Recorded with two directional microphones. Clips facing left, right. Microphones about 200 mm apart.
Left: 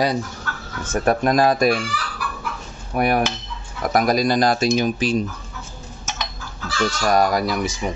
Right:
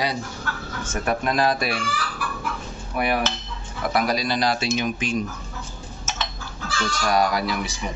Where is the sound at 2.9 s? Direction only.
45° left (ahead or behind).